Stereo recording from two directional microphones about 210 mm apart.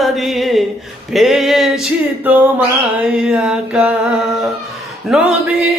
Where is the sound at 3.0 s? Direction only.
5° right (ahead or behind).